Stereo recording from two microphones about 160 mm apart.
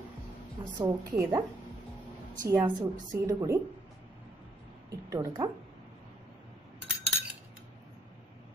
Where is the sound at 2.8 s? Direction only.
20° right (ahead or behind).